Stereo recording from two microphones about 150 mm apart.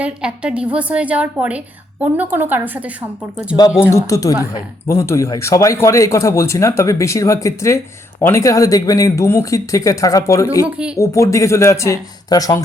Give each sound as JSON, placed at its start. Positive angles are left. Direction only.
{"t": 0.0, "sound": "a woman's voice", "side_deg": -5}
{"t": 3.9, "sound": "speech", "side_deg": 20}